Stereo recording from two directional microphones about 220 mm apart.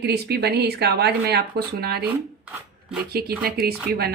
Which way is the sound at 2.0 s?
5° right (ahead or behind).